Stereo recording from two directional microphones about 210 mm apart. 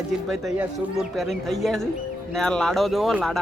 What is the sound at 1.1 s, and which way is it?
Speech, centre (ahead or behind).